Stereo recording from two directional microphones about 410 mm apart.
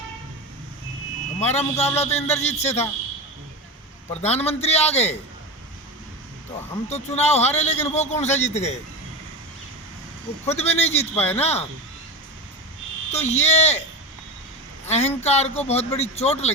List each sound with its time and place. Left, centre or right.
1.4 s a man's voice: centre
4.1 s a man's voice: centre
6.8 s a man's voice: centre
10.4 s a man's voice: centre
13.1 s a man's voice: centre
14.8 s a man's voice: centre